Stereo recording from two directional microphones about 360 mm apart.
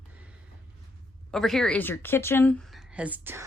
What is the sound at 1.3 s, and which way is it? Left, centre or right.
A woman's voice, centre.